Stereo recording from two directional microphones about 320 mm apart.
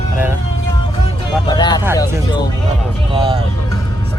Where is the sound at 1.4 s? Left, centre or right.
Centre.